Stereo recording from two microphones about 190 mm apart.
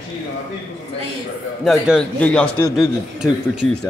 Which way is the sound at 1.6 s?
Centre (ahead or behind).